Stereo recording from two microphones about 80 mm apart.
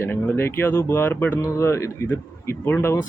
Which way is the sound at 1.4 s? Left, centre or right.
Left.